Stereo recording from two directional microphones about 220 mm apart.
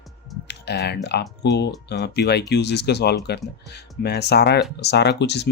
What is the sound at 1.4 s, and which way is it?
Speech, 50° left (ahead or behind).